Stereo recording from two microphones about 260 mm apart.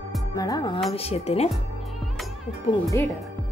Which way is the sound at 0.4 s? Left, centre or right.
Centre.